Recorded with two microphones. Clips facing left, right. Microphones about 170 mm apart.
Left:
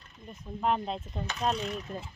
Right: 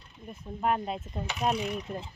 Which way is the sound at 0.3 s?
5° right (ahead or behind).